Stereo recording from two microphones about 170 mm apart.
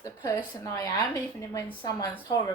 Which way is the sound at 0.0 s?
20° left (ahead or behind).